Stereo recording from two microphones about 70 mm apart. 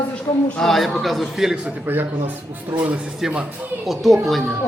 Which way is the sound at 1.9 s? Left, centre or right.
Right.